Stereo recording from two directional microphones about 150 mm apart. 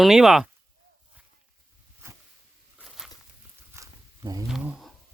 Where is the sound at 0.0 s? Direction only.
5° right (ahead or behind).